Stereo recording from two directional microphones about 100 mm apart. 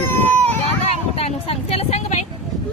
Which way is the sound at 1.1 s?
90° left.